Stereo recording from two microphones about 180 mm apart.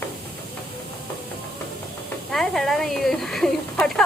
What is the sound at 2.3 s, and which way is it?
Speech, centre (ahead or behind).